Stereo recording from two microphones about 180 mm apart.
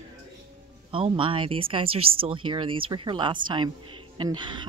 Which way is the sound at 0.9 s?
30° right (ahead or behind).